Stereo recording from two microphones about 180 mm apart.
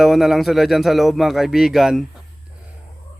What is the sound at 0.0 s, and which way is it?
Speech, centre (ahead or behind).